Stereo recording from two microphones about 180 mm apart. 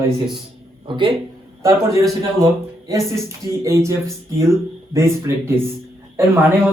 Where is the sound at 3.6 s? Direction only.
15° right (ahead or behind).